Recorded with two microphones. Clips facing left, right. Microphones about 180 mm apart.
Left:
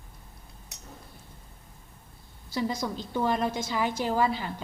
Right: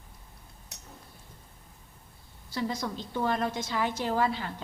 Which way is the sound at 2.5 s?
Centre (ahead or behind).